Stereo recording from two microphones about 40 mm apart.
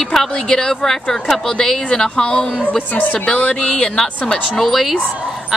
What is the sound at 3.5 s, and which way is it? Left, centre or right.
Speech, left.